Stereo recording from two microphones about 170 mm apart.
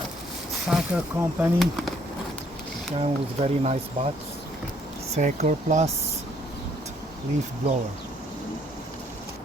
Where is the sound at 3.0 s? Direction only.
40° right (ahead or behind).